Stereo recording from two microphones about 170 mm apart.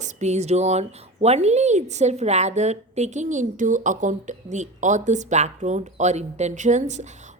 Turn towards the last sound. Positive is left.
turn(degrees=-45)  # may be behind; listen again after turning